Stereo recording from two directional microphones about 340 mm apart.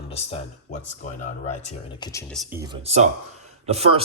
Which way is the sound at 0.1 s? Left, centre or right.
Centre.